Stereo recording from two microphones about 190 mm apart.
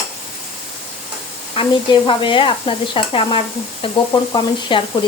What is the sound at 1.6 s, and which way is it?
Stir, 25° left (ahead or behind).